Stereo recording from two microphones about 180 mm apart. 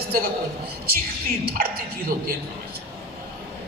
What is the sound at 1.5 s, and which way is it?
Speech, 50° right (ahead or behind).